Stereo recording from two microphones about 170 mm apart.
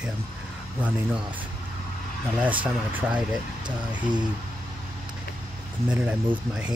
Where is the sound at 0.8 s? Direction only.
10° right (ahead or behind).